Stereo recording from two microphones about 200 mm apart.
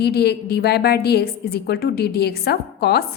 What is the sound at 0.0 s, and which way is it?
A woman's voice, 55° left (ahead or behind).